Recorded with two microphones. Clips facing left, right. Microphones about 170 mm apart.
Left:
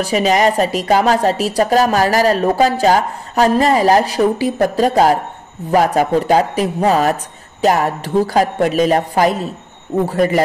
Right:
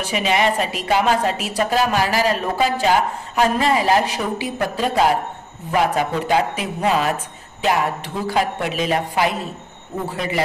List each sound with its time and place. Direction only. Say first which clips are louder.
0.0 s a woman's voice: left 6 dB; 40° left (ahead or behind)